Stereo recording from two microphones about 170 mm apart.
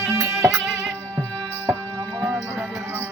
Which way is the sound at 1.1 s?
10° left (ahead or behind).